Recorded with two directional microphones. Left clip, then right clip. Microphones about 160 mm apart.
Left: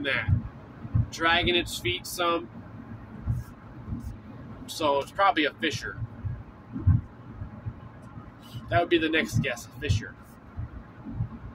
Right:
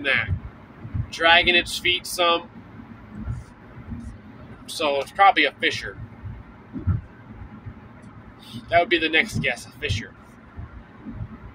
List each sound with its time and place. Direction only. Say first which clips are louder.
0.0 s speech: right 6 dB; 15° left (ahead or behind)
4.7 s speech: right 5 dB; 5° left (ahead or behind)
8.6 s speech: right 5 dB; 15° left (ahead or behind)